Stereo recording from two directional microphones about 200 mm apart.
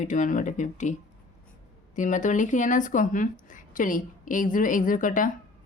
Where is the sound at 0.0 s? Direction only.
40° left (ahead or behind).